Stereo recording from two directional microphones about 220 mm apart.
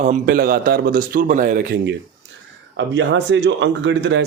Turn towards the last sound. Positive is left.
turn(degrees=-55)  # may be behind; listen again after turning